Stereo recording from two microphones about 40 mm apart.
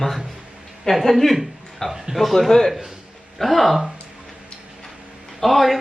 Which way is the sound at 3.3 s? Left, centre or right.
Centre.